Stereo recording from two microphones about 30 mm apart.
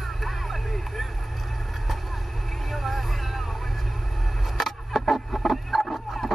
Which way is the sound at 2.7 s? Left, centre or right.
Centre.